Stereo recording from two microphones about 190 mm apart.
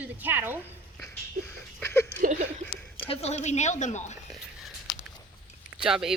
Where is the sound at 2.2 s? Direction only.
45° right (ahead or behind).